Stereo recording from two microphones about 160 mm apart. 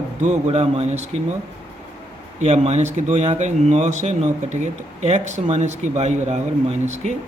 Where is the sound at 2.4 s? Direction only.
45° right (ahead or behind).